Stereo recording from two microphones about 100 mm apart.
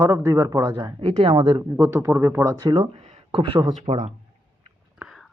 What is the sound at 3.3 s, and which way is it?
Speech, 60° right (ahead or behind).